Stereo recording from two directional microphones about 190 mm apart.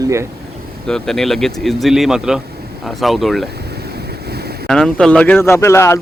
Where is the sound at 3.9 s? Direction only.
55° right (ahead or behind).